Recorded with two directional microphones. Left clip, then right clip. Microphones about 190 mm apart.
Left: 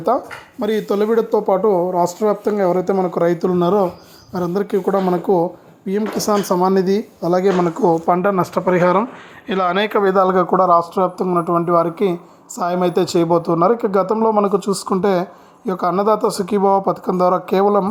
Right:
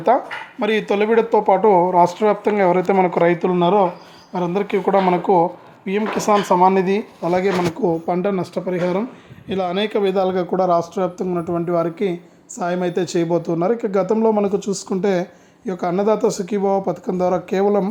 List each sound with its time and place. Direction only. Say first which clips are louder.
0.9 s a woman's voice: even; 5° right (ahead or behind)
1.2 s speech: right 1 dB; 15° left (ahead or behind)
7.9 s a woman's voice: left 7 dB; centre (ahead or behind)
10.5 s a woman's voice: left 4 dB; 10° right (ahead or behind)